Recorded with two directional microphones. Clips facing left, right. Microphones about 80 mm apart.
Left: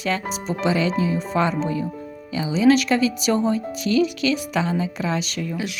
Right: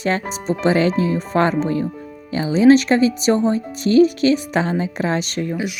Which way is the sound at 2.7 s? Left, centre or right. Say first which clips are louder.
Right 5 dB; right.